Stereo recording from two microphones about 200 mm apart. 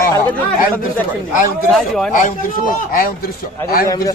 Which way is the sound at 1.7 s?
Centre (ahead or behind).